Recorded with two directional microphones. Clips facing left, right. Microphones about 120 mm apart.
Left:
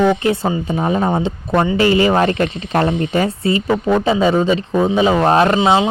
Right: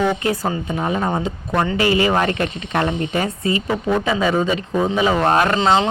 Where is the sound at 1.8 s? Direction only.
30° left (ahead or behind).